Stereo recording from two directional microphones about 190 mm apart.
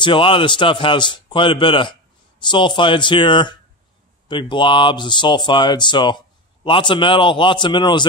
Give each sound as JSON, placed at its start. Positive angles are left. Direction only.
{"t": 0.0, "sound": "speech", "side_deg": 25}